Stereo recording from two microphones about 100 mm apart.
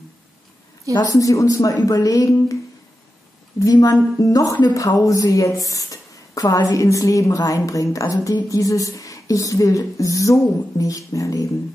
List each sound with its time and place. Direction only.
0.9 s a woman's voice: 35° left (ahead or behind)
3.7 s a woman's voice: 40° left (ahead or behind)